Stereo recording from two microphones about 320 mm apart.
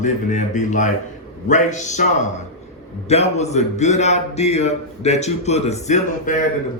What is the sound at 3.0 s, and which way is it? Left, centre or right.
Speech, centre.